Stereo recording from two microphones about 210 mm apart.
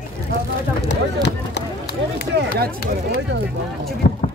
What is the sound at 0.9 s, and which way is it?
Run, 55° left (ahead or behind).